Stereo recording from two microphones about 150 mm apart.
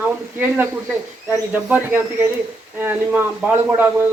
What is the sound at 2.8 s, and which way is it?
Speech, 15° right (ahead or behind).